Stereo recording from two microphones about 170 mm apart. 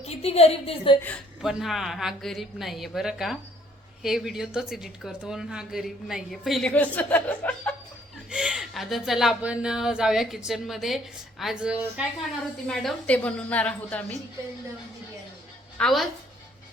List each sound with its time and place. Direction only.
0.0 s a woman's voice: 35° left (ahead or behind)
1.0 s speech: centre (ahead or behind)
8.3 s speech: 5° right (ahead or behind)
12.6 s a woman's voice: 5° left (ahead or behind)
15.8 s speech: centre (ahead or behind)